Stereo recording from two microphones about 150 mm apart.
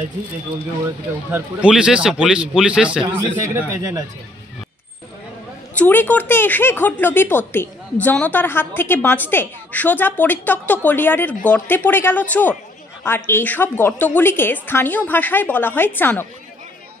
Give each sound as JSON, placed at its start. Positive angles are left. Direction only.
{"t": 1.3, "sound": "a man's voice", "side_deg": -5}
{"t": 5.8, "sound": "speech", "side_deg": 10}